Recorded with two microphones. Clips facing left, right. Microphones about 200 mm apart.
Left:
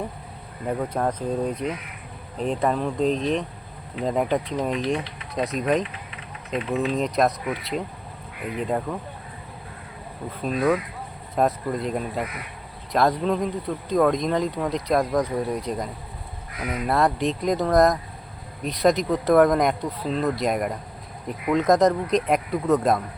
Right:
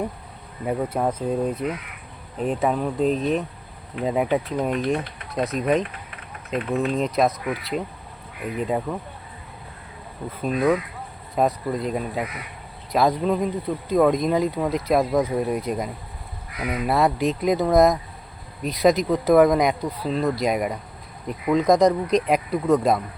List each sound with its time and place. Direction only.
0.6 s speech: 5° right (ahead or behind)
5.8 s a sound: 50° right (ahead or behind)
6.7 s speech: centre (ahead or behind)
10.4 s speech: 5° right (ahead or behind)